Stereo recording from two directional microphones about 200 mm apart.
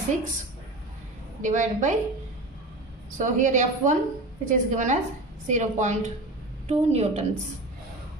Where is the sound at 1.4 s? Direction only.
40° right (ahead or behind).